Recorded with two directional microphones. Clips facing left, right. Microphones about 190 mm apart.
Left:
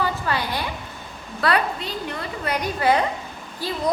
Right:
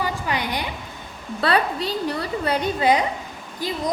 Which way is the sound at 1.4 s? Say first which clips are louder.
Right 1 dB; 30° right (ahead or behind).